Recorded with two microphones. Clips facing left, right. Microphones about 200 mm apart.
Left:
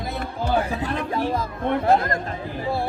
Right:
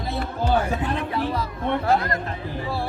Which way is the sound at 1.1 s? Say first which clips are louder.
Left 1 dB; 45° left (ahead or behind).